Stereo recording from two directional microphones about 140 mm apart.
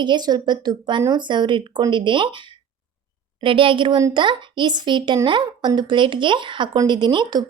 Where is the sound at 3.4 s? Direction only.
40° right (ahead or behind).